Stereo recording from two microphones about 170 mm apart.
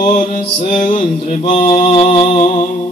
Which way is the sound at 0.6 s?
35° left (ahead or behind).